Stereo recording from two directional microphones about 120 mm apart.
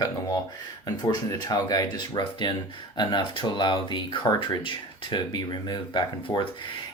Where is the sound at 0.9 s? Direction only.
35° left (ahead or behind).